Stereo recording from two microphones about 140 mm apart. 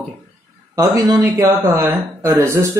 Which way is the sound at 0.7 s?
25° right (ahead or behind).